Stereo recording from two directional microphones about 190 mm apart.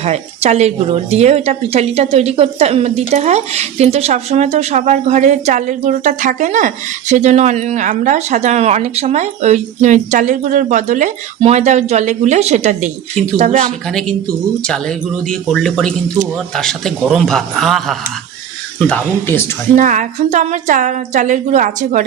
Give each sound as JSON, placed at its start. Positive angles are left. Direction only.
{"t": 0.0, "sound": "speech", "side_deg": -35}
{"t": 13.8, "sound": "speech", "side_deg": 5}
{"t": 19.7, "sound": "speech", "side_deg": -40}